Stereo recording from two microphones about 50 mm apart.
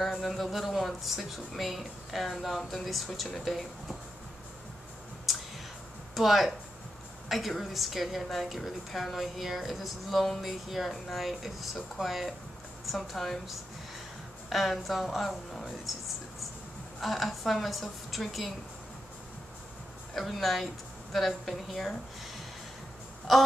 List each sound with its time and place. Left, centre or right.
0.0 s a woman's voice: centre
6.1 s a woman's voice: centre
20.2 s a woman's voice: centre